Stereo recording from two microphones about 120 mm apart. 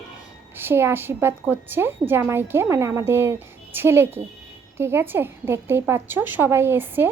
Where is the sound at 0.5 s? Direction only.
20° right (ahead or behind).